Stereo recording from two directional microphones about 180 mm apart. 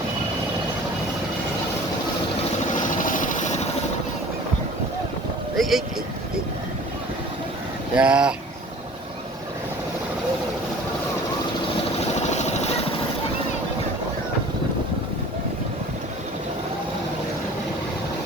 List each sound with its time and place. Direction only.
2.7 s vehicle: 45° left (ahead or behind)
5.5 s a sound: centre (ahead or behind)
7.9 s speech: 5° right (ahead or behind)
11.9 s vehicle: 40° left (ahead or behind)